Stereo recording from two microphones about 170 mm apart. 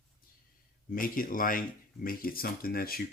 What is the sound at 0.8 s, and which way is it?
Speech, 55° left (ahead or behind).